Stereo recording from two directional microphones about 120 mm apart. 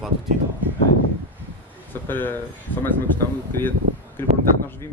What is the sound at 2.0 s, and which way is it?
Speech, 15° left (ahead or behind).